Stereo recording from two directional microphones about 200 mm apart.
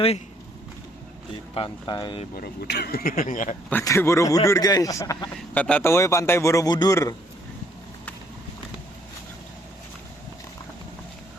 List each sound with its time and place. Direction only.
1.5 s speech: 25° left (ahead or behind)
2.3 s speech: 50° left (ahead or behind)
3.7 s a man's voice: 10° left (ahead or behind)